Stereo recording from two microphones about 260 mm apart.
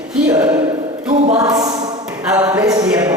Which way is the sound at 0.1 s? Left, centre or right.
Centre.